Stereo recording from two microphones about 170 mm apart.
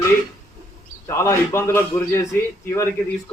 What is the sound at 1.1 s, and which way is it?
Speech, 15° left (ahead or behind).